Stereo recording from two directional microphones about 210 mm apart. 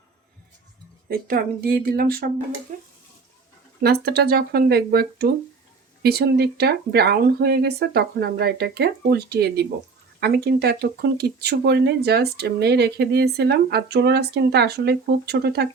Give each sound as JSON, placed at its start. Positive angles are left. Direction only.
{"t": 1.0, "sound": "speech", "side_deg": -45}
{"t": 2.7, "sound": "stir", "side_deg": -40}
{"t": 3.8, "sound": "speech", "side_deg": -50}